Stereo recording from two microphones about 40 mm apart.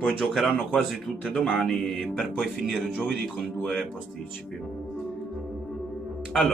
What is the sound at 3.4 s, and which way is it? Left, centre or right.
Speech, centre.